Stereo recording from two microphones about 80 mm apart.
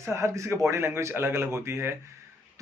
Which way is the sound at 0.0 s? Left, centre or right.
Right.